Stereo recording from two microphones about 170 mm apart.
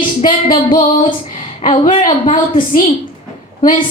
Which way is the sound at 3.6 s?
50° left (ahead or behind).